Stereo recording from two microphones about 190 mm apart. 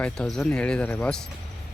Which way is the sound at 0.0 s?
5° left (ahead or behind).